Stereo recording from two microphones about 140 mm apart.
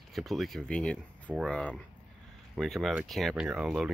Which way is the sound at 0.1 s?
Centre (ahead or behind).